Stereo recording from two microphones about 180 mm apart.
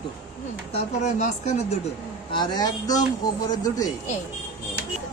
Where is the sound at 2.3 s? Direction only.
25° left (ahead or behind).